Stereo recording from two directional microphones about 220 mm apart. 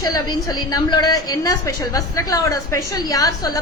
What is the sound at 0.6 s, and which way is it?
A woman's voice, 20° left (ahead or behind).